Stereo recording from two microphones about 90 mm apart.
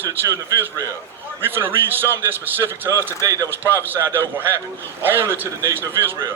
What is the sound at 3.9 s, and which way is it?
A man's voice, 25° right (ahead or behind).